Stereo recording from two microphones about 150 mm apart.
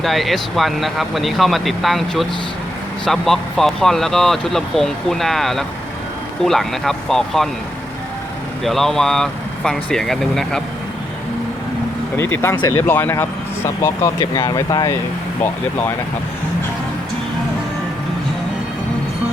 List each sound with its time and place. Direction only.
0.0 s speech: centre (ahead or behind)
8.6 s speech: centre (ahead or behind)
12.1 s speech: 15° left (ahead or behind)
14.2 s speech: 25° left (ahead or behind)